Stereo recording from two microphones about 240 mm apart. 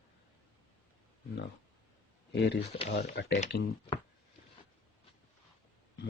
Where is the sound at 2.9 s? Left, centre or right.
Left.